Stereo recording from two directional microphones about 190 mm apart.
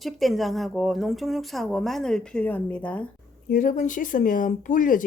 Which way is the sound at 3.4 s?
45° left (ahead or behind).